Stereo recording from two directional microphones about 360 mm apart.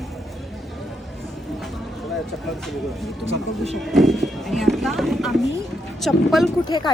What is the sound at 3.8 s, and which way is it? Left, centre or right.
Speech, centre.